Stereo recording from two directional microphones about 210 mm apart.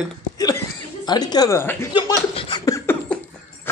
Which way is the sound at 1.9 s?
25° left (ahead or behind).